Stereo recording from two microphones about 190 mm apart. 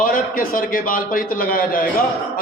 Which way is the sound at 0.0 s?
45° left (ahead or behind).